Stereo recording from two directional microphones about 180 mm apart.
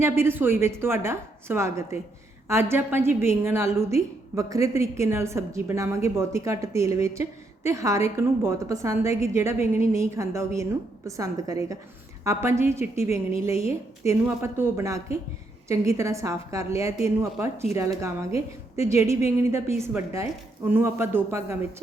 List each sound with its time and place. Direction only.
0.0 s a woman's voice: 15° right (ahead or behind)